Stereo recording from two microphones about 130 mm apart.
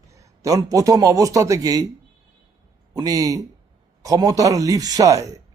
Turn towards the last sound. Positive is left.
turn(degrees=-25)  # may be behind; listen again after turning